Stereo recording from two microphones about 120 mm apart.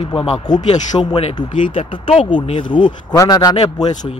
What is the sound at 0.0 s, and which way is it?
Speech, 50° left (ahead or behind).